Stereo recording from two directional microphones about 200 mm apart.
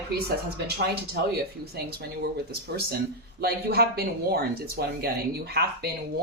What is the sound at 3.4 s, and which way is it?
Speech, 50° right (ahead or behind).